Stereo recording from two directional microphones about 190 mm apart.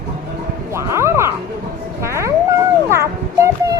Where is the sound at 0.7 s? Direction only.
15° right (ahead or behind).